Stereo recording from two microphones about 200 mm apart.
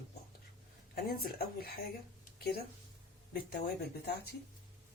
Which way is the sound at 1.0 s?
50° left (ahead or behind).